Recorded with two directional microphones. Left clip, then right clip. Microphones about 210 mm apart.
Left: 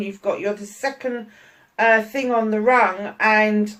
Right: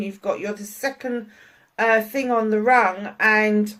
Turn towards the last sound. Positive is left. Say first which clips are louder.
# left 1 dB
turn(degrees=-45)  # may be behind; listen again after turning